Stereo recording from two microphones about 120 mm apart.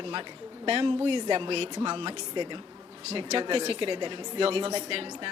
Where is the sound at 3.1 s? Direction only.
55° right (ahead or behind).